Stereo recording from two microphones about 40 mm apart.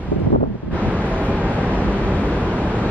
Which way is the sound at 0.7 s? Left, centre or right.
Right.